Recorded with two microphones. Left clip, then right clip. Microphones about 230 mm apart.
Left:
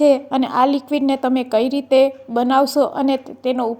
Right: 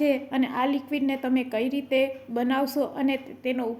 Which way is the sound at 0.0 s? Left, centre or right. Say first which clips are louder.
Left 10 dB; left.